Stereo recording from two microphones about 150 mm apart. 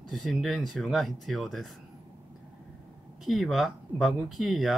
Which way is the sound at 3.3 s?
Centre (ahead or behind).